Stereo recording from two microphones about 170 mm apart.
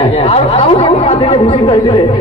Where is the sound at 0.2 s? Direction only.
35° left (ahead or behind).